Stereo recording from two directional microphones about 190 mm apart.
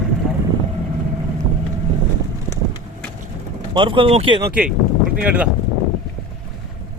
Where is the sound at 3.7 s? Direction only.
25° right (ahead or behind).